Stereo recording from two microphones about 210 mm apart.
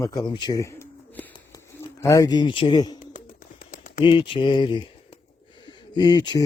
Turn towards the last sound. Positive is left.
turn(degrees=20)  # may be behind; listen again after turning